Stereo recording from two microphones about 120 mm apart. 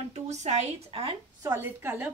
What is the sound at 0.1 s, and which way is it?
A woman's voice, 70° right (ahead or behind).